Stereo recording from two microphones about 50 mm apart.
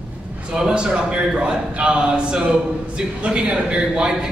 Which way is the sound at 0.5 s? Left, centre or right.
Centre.